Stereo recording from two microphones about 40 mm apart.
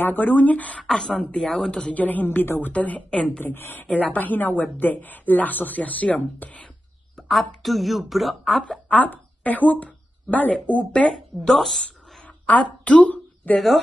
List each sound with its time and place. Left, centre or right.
0.0 s a woman's voice: left
0.8 s speech: centre
1.4 s a woman's voice: centre
1.7 s speech: left
2.0 s a woman's voice: left
2.2 s a woman's voice: left
2.6 s speech: left
3.4 s a woman's voice: left
7.2 s speech: centre
8.8 s speech: left
10.9 s speech: left
11.5 s a woman's voice: centre
12.4 s speech: left